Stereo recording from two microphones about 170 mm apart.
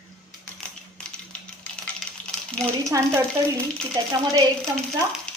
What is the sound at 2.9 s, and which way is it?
Speech, 20° right (ahead or behind).